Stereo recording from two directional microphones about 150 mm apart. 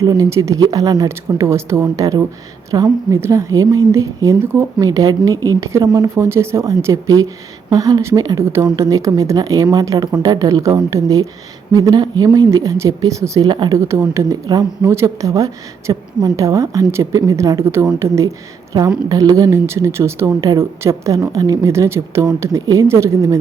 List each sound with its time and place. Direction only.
0.0 s speech: 20° right (ahead or behind)